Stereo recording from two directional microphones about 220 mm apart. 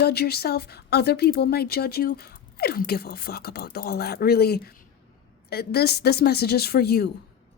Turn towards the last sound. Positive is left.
turn(degrees=45)  # may be behind; listen again after turning